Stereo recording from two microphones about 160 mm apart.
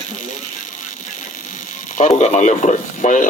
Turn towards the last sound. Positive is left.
turn(degrees=50)  # may be behind; listen again after turning